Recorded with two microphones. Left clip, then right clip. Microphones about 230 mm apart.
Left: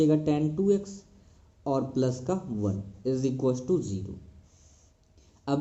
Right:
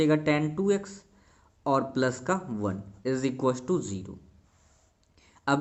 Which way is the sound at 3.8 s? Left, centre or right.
Right.